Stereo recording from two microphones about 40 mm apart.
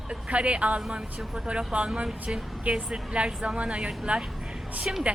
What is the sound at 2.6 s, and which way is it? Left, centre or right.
A woman's voice, right.